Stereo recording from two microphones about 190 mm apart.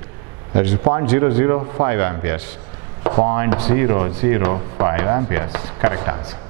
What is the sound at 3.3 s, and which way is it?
A man's voice, 15° right (ahead or behind).